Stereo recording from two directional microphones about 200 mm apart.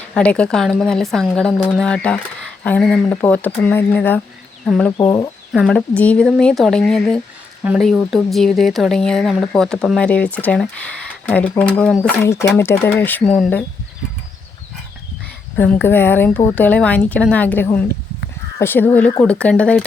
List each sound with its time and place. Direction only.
0.1 s speech: 5° left (ahead or behind)
5.0 s speech: 15° left (ahead or behind)
5.5 s speech: centre (ahead or behind)
15.5 s speech: 10° left (ahead or behind)